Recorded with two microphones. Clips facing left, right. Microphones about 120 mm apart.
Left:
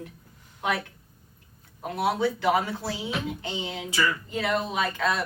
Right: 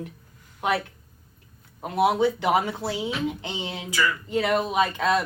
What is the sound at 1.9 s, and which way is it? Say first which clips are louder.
Speech: right 4 dB; 15° right (ahead or behind).